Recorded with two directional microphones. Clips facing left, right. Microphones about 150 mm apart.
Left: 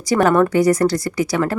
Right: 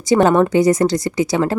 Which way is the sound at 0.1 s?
25° right (ahead or behind).